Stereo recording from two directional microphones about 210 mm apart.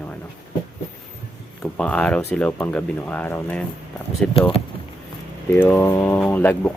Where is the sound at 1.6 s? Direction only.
5° left (ahead or behind).